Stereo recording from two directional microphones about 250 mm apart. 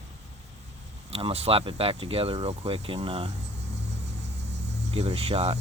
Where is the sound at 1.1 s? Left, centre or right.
Right.